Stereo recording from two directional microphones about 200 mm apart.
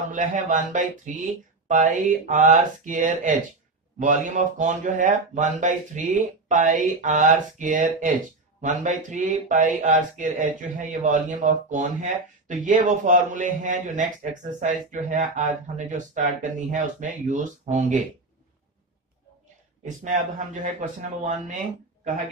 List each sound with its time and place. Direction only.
0.1 s speech: 40° right (ahead or behind)
19.8 s speech: 40° right (ahead or behind)